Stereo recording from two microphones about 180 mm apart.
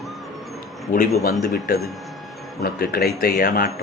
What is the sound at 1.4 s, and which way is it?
Speech, 55° left (ahead or behind).